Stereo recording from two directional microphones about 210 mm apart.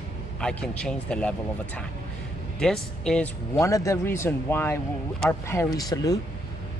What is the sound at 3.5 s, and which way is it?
Speech, 15° left (ahead or behind).